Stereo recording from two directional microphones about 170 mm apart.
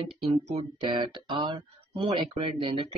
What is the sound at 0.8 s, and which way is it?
Speech, 25° right (ahead or behind).